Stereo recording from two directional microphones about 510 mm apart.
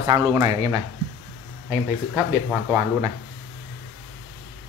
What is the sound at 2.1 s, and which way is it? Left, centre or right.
Speech, centre.